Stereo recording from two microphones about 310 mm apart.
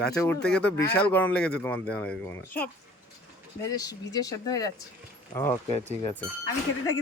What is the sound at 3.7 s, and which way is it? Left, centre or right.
Speech, centre.